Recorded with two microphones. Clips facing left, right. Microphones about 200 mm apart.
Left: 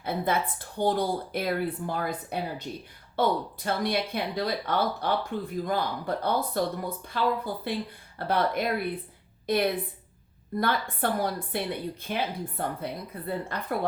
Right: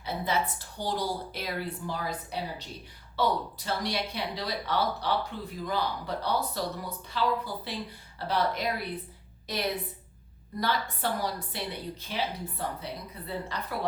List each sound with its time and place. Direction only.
0.0 s a woman's voice: 55° left (ahead or behind)